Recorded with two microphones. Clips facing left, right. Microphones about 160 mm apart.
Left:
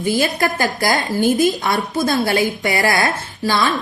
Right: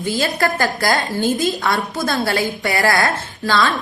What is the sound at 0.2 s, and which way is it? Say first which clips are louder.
A woman's voice: even; 15° left (ahead or behind).